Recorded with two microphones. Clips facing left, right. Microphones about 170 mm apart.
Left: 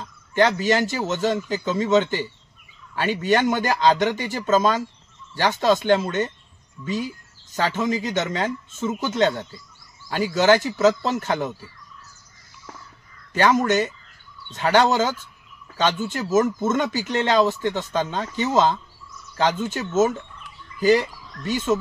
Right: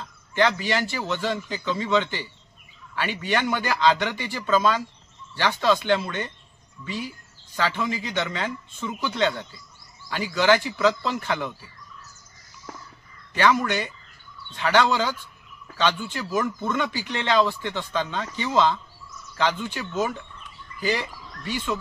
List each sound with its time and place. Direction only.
0.0 s speech: 45° left (ahead or behind)
13.3 s speech: 45° left (ahead or behind)